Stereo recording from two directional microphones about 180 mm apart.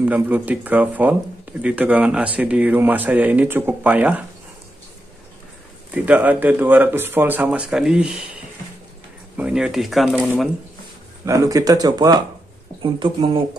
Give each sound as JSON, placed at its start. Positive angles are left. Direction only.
{"t": 0.0, "sound": "speech", "side_deg": -10}
{"t": 5.9, "sound": "speech", "side_deg": -10}
{"t": 9.4, "sound": "speech", "side_deg": -5}
{"t": 11.2, "sound": "speech", "side_deg": -20}